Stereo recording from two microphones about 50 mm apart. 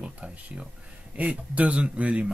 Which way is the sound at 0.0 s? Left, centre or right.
Right.